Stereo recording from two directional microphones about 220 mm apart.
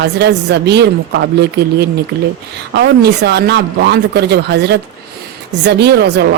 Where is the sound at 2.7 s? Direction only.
50° right (ahead or behind).